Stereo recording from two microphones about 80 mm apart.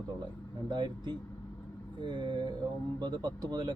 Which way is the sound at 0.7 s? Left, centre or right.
Right.